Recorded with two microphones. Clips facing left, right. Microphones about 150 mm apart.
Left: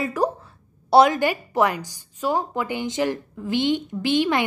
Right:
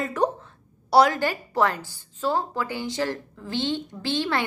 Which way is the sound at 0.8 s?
20° left (ahead or behind).